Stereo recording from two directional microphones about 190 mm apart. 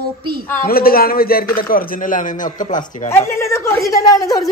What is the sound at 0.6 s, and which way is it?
Speech, 50° left (ahead or behind).